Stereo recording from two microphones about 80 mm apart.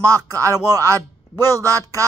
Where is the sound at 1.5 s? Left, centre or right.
Right.